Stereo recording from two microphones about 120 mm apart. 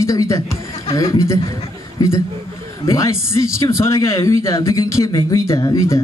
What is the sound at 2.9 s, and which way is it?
Speech, 25° left (ahead or behind).